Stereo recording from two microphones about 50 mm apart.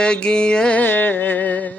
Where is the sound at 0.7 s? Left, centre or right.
Left.